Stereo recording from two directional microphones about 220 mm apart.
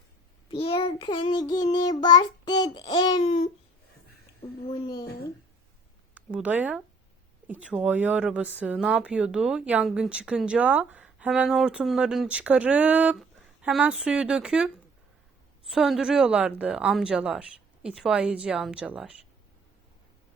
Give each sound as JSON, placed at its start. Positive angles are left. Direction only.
{"t": 0.4, "sound": "child singing", "side_deg": 25}
{"t": 3.2, "sound": "child singing", "side_deg": 30}
{"t": 4.7, "sound": "child singing", "side_deg": 20}
{"t": 6.1, "sound": "a woman's voice", "side_deg": -5}